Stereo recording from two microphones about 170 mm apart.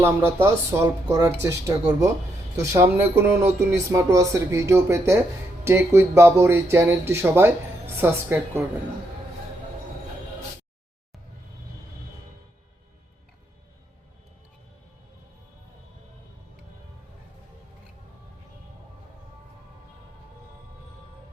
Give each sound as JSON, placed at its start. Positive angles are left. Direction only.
{"t": 0.0, "sound": "speech", "side_deg": -15}